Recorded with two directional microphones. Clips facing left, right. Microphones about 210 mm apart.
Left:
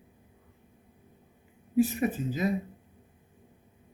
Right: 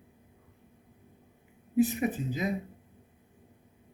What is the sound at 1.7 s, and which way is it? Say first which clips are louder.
Speech: left 1 dB; 15° right (ahead or behind).